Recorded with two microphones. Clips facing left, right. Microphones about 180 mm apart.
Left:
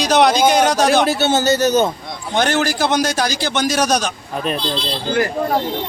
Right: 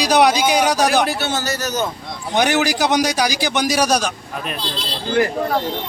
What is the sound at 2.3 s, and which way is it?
A man's voice, 15° right (ahead or behind).